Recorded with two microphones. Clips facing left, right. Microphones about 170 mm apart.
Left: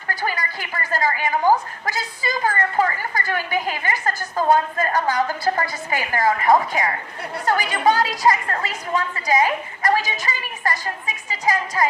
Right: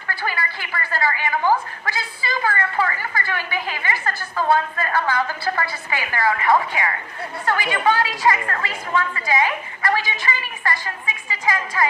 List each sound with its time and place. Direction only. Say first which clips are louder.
0.1 s a woman's voice: left 1 dB; 40° left (ahead or behind)